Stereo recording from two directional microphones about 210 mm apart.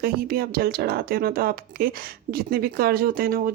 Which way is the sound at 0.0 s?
45° right (ahead or behind).